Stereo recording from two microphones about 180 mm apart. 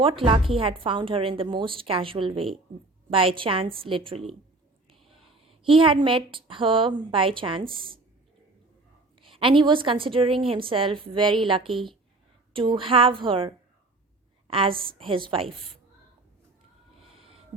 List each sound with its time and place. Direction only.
0.0 s a woman's voice: 30° right (ahead or behind)
5.5 s a woman's voice: 30° right (ahead or behind)
9.2 s a woman's voice: 30° right (ahead or behind)
17.2 s a sound: 30° right (ahead or behind)